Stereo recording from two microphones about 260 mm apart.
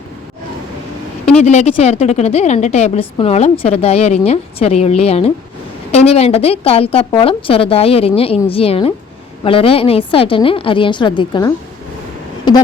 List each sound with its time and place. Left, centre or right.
1.4 s a woman's voice: left